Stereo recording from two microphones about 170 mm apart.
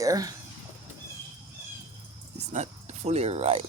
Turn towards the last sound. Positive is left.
turn(degrees=-35)  # may be behind; listen again after turning